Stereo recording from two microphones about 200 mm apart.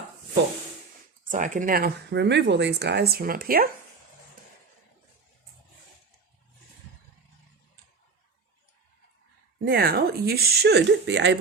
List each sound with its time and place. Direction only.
1.3 s speech: 40° right (ahead or behind)
9.6 s speech: 50° right (ahead or behind)